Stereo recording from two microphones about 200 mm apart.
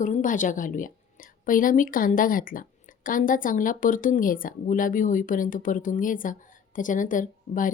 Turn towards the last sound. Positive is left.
turn(degrees=40)  # may be behind; listen again after turning